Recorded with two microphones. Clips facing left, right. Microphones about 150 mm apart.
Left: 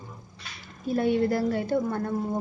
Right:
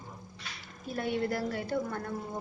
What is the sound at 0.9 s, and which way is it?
A woman's voice, 30° left (ahead or behind).